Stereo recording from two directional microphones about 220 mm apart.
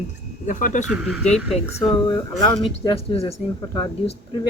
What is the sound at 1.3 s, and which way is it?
Speech, centre (ahead or behind).